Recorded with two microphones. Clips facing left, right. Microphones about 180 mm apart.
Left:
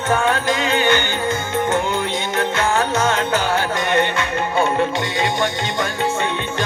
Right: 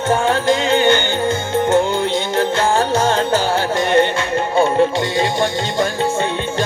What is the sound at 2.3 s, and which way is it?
Music, 30° right (ahead or behind).